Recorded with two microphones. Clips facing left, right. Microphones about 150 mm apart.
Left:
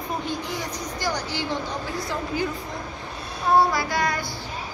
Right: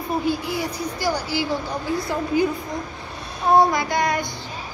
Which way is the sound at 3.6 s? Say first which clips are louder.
Right 3 dB; 20° right (ahead or behind).